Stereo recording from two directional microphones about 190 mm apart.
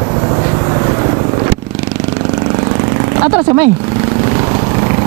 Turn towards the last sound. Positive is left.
turn(degrees=-20)  # may be behind; listen again after turning